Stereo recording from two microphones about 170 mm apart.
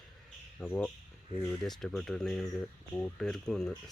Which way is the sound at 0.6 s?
10° left (ahead or behind).